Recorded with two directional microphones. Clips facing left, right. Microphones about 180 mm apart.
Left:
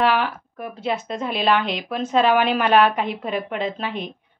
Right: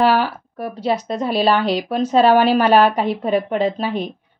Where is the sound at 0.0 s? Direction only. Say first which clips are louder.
Right 4 dB; 35° right (ahead or behind).